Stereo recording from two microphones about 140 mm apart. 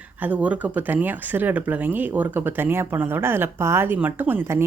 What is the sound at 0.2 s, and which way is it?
Speech, 10° right (ahead or behind).